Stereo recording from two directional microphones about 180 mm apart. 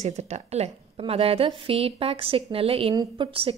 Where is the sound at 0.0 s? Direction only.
40° right (ahead or behind).